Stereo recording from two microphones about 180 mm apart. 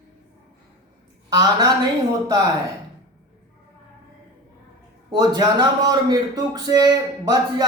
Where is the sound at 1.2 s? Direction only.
20° right (ahead or behind).